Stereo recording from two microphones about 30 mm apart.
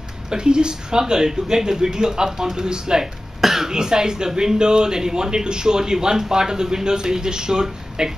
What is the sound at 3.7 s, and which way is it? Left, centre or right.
Speech, right.